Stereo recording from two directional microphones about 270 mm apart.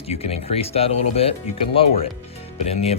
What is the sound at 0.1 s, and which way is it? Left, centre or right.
Speech, left.